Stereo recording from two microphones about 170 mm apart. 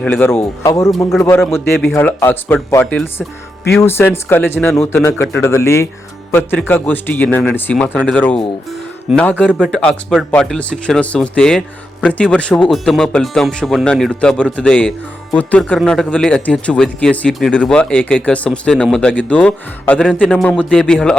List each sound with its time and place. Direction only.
0.0 s a man's voice: 10° left (ahead or behind)
0.9 s speech: centre (ahead or behind)
1.5 s a man's voice: 15° left (ahead or behind)
9.1 s speech: 5° right (ahead or behind)